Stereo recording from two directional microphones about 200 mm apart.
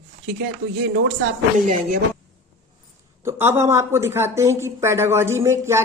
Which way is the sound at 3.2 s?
10° right (ahead or behind).